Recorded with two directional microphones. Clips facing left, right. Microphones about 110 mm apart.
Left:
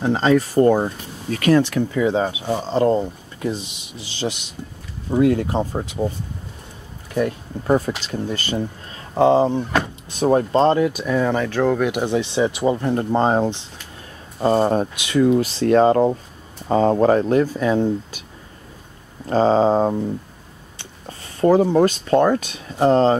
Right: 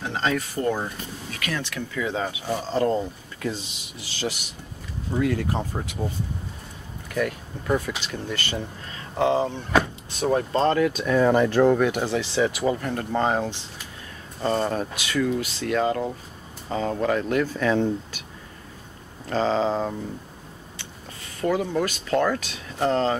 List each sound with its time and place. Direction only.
0.0 s speech: 35° left (ahead or behind)
7.2 s speech: 30° left (ahead or behind)
10.9 s speech: 5° left (ahead or behind)
11.2 s speech: 5° right (ahead or behind)
11.8 s speech: 15° left (ahead or behind); by 14.9 s 35° left (ahead or behind)
15.0 s speech: 25° left (ahead or behind)
15.2 s speech: 35° left (ahead or behind)
17.5 s speech: 15° left (ahead or behind)
19.2 s speech: 40° left (ahead or behind)
21.4 s speech: 35° left (ahead or behind)